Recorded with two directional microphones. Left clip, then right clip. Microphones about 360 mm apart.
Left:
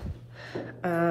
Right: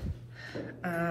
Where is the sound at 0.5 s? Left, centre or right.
Centre.